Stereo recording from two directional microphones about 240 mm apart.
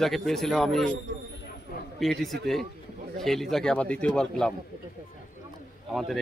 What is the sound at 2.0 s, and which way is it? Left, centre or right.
Speech, centre.